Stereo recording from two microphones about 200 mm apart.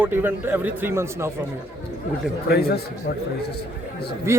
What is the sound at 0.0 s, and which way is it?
Speech, 10° right (ahead or behind).